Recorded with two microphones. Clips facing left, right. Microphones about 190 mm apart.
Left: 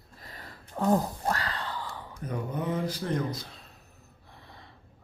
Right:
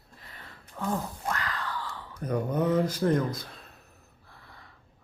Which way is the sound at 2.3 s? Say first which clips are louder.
Right 6 dB; 45° right (ahead or behind).